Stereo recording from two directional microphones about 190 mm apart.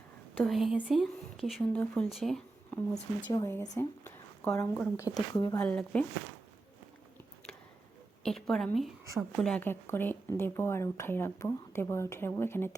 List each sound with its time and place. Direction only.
0.3 s speech: centre (ahead or behind)
3.2 s a woman's voice: 20° left (ahead or behind)
5.1 s speech: 20° left (ahead or behind)
5.5 s speech: 5° left (ahead or behind)
8.2 s speech: centre (ahead or behind)